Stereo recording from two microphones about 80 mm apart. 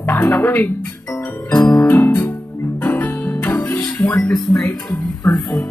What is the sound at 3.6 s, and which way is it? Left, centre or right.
Music, centre.